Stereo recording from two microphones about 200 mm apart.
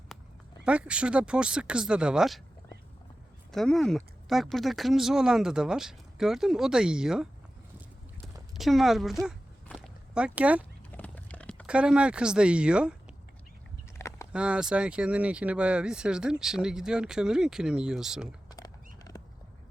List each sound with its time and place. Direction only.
0.6 s speech: 5° right (ahead or behind)
3.5 s speech: centre (ahead or behind)
8.5 s walk: centre (ahead or behind)
10.9 s horse: 5° left (ahead or behind)
11.6 s speech: 5° right (ahead or behind)
14.0 s a sound: 15° left (ahead or behind)
14.3 s speech: 5° right (ahead or behind)
19.1 s a sound: 20° left (ahead or behind)